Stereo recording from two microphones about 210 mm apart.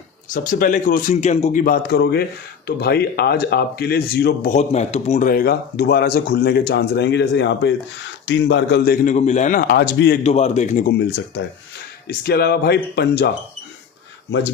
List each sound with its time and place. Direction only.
0.3 s speech: 40° left (ahead or behind)
4.5 s speech: 30° left (ahead or behind); by 10.2 s 50° left (ahead or behind)
10.2 s speech: 30° left (ahead or behind)
11.0 s speech: 50° left (ahead or behind)